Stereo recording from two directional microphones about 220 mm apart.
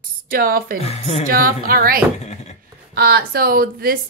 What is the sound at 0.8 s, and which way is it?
Speech, 30° left (ahead or behind).